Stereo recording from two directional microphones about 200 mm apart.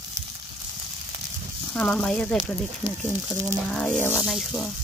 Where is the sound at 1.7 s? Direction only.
5° left (ahead or behind).